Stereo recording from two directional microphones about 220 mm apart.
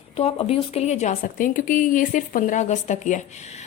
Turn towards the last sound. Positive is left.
turn(degrees=30)  # may be behind; listen again after turning